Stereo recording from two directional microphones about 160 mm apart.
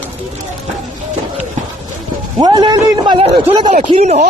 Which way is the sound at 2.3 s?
25° right (ahead or behind).